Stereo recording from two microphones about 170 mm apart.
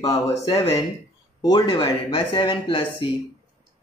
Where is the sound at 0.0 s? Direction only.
20° left (ahead or behind).